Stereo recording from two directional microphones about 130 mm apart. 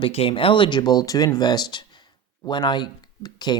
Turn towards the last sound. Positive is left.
turn(degrees=35)  # may be behind; listen again after turning